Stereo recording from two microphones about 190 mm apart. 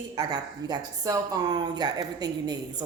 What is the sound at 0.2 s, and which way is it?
Speech, 20° right (ahead or behind).